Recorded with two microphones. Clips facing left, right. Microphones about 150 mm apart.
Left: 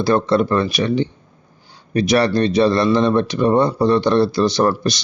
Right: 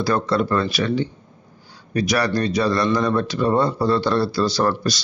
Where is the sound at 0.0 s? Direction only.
25° left (ahead or behind).